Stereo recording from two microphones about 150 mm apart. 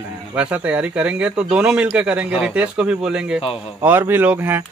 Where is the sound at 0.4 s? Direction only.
10° right (ahead or behind).